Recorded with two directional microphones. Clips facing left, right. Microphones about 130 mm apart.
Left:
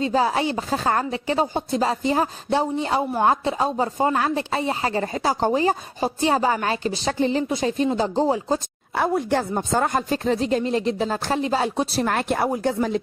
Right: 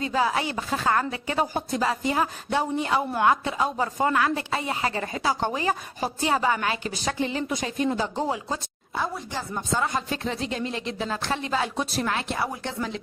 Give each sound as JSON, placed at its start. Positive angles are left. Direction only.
{"t": 0.0, "sound": "speech", "side_deg": 35}
{"t": 8.9, "sound": "speech", "side_deg": 60}
{"t": 12.1, "sound": "speech", "side_deg": 50}